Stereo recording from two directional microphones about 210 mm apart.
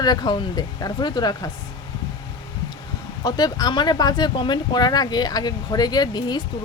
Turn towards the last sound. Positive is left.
turn(degrees=20)  # may be behind; listen again after turning